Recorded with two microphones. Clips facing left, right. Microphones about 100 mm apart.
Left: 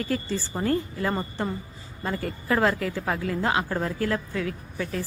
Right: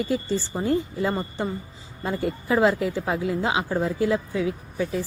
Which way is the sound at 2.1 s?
15° right (ahead or behind).